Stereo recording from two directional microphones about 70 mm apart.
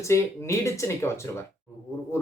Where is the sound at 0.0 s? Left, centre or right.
Left.